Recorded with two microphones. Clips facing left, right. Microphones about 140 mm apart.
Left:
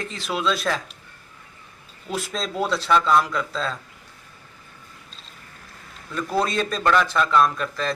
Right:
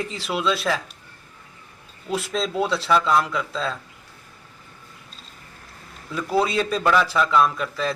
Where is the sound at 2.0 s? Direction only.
Centre (ahead or behind).